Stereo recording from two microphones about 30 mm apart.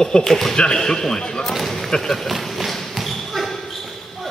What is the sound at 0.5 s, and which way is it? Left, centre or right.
Speech, left.